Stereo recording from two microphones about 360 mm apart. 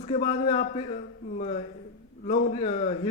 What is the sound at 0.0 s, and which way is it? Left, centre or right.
A man's voice, centre.